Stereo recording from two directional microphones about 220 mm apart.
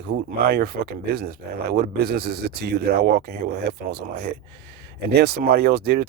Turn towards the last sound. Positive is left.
turn(degrees=-45)  # may be behind; listen again after turning